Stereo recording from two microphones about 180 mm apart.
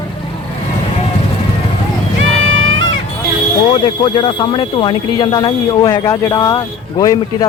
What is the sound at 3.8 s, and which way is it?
Speech, 30° left (ahead or behind).